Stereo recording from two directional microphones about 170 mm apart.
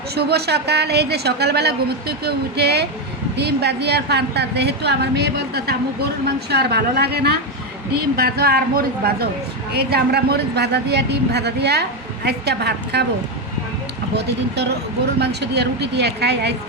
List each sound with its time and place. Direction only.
0.1 s a woman's voice: 70° right (ahead or behind)
14.1 s a woman's voice: 75° right (ahead or behind)